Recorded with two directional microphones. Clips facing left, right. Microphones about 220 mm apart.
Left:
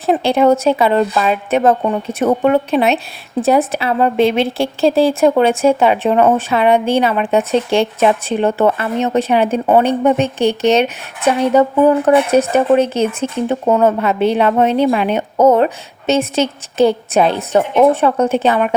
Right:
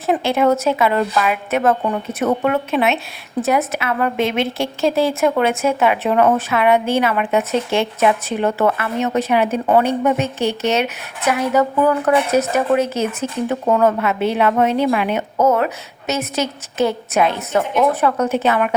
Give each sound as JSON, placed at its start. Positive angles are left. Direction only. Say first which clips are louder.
{"t": 0.3, "sound": "a woman's voice", "louder": "left 4 dB", "side_deg": 30}